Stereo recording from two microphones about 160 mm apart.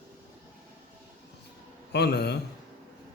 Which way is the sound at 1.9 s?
90° left.